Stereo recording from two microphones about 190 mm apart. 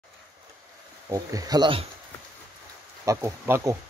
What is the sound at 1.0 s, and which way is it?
Speech, 20° right (ahead or behind).